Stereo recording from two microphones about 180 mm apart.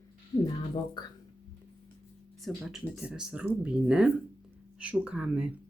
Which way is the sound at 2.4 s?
Centre (ahead or behind).